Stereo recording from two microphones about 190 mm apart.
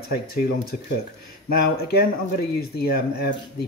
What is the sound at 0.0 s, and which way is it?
Speech, 55° left (ahead or behind).